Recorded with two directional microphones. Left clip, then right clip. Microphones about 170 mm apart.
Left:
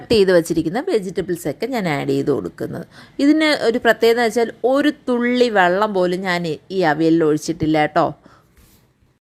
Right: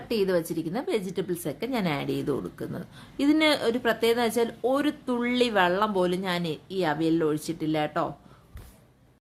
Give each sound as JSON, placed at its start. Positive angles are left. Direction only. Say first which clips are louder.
{"t": 0.1, "sound": "a woman's voice", "louder": "left 12 dB", "side_deg": 40}